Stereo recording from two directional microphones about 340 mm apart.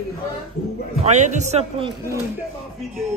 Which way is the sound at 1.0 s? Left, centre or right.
Right.